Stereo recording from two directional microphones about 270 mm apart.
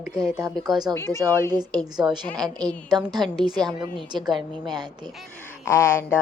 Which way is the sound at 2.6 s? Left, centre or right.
Centre.